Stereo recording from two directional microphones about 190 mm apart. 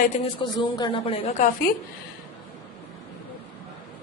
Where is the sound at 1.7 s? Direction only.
45° left (ahead or behind).